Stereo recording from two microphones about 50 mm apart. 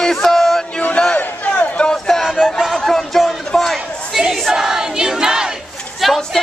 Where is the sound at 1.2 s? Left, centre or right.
Left.